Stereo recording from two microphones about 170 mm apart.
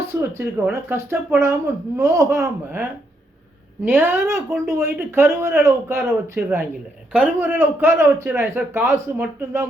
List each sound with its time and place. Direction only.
0.1 s speech: 15° right (ahead or behind)